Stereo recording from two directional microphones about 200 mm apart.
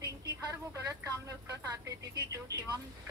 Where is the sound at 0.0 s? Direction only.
15° right (ahead or behind).